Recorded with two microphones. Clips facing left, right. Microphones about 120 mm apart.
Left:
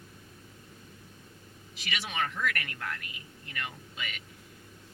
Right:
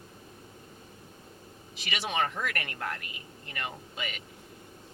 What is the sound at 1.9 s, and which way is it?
Speech, 30° right (ahead or behind).